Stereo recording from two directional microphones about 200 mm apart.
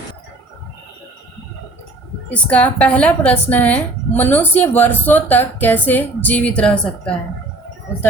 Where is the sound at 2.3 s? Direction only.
5° left (ahead or behind).